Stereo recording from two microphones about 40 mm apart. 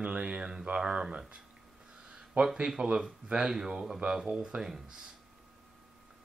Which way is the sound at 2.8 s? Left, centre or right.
Centre.